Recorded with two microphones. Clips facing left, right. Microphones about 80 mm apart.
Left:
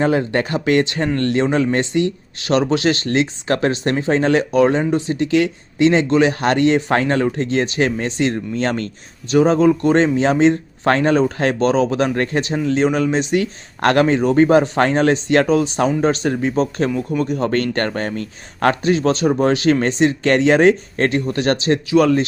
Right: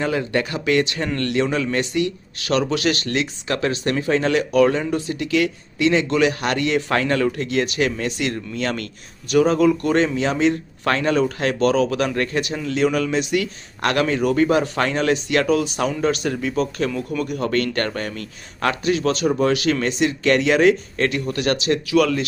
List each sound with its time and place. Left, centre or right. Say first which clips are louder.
0.0 s speech: left 4 dB; left